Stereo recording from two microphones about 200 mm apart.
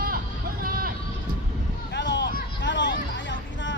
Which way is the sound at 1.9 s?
60° left (ahead or behind).